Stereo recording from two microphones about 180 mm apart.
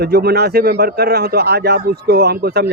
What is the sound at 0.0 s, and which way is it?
A man's voice, 65° right (ahead or behind).